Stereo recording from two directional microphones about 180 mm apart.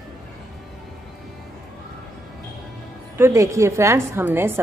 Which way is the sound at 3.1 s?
15° right (ahead or behind).